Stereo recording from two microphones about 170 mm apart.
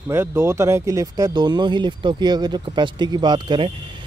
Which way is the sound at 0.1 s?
15° right (ahead or behind).